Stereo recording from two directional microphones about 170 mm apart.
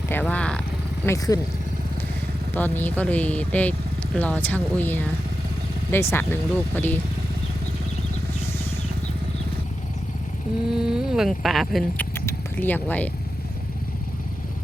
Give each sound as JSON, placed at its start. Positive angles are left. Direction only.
{"t": 0.1, "sound": "speech", "side_deg": 10}
{"t": 1.0, "sound": "speech", "side_deg": 20}
{"t": 2.6, "sound": "speech", "side_deg": 10}
{"t": 10.8, "sound": "speech", "side_deg": -5}
{"t": 12.1, "sound": "a sound", "side_deg": 10}